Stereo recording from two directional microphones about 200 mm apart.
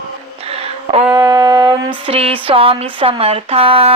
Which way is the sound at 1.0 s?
15° right (ahead or behind).